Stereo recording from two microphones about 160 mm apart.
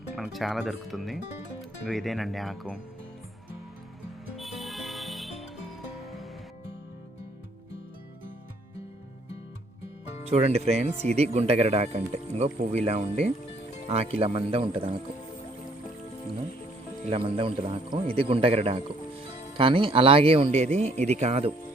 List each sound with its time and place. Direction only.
0.2 s speech: centre (ahead or behind)
4.4 s music: centre (ahead or behind)
10.2 s speech: 40° right (ahead or behind)
17.1 s speech: 35° right (ahead or behind)